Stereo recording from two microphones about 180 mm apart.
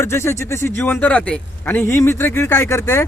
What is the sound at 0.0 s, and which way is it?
Speech, 15° left (ahead or behind).